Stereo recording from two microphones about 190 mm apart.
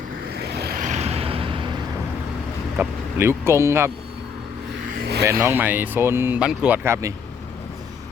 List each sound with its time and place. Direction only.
0.4 s vehicle: 60° right (ahead or behind); by 1.7 s 30° right (ahead or behind)
2.7 s speech: 15° right (ahead or behind)
5.2 s speech: 15° right (ahead or behind)